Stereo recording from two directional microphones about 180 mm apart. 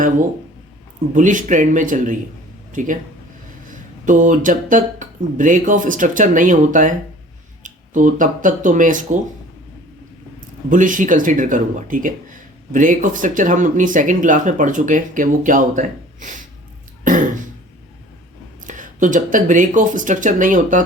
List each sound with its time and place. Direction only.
1.1 s speech: 45° right (ahead or behind)
10.7 s speech: 45° right (ahead or behind)
17.0 s throat clearing: 45° right (ahead or behind)
18.6 s speech: 45° right (ahead or behind)